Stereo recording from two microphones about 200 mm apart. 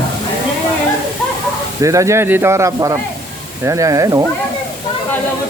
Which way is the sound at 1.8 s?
15° right (ahead or behind).